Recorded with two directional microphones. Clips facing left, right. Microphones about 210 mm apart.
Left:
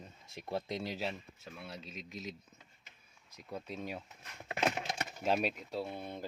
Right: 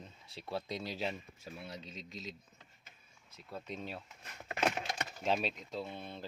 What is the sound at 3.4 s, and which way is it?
Speech, 15° left (ahead or behind).